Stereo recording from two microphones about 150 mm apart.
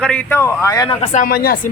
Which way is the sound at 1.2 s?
85° left.